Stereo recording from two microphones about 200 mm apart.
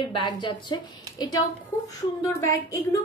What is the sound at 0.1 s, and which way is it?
A woman's voice, 20° left (ahead or behind).